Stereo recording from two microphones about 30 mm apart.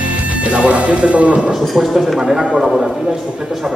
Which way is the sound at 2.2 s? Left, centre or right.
Right.